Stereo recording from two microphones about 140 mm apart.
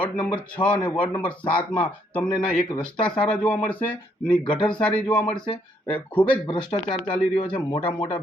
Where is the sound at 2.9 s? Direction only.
5° left (ahead or behind).